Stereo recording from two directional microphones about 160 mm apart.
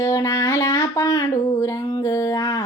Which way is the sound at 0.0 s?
20° left (ahead or behind).